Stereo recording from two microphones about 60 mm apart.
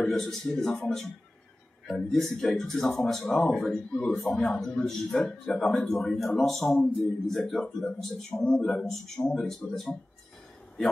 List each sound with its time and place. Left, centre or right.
0.0 s a man's voice: centre